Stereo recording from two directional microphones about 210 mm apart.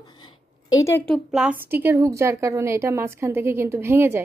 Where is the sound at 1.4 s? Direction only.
Centre (ahead or behind).